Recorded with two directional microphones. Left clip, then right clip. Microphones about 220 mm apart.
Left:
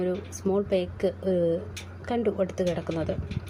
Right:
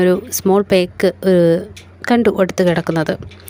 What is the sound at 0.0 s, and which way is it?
A woman's voice, 50° right (ahead or behind).